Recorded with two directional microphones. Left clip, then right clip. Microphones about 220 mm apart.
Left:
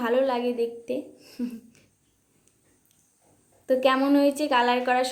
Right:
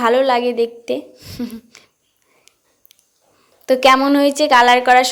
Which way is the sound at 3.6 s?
25° right (ahead or behind).